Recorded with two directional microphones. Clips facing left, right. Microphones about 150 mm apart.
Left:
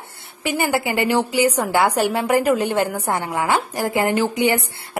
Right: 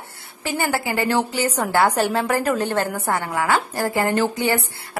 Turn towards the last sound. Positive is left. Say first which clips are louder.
# left 2 dB
turn(degrees=15)  # may be behind; listen again after turning